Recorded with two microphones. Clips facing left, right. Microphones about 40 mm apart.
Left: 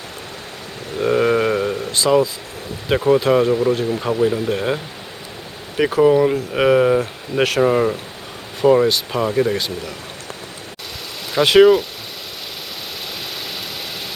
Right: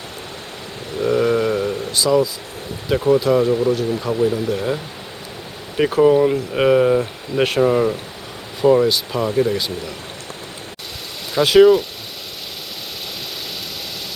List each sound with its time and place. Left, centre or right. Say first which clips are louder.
0.9 s a sound: left 1 dB; left
2.9 s speech: left 1 dB; left
6.0 s speech: even; centre; by 9.6 s left
11.3 s speech: even; centre